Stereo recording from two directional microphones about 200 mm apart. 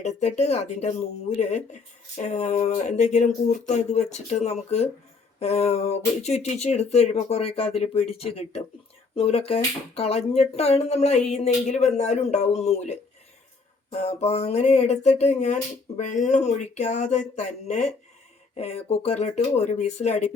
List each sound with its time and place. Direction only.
0.0 s speech: 35° left (ahead or behind)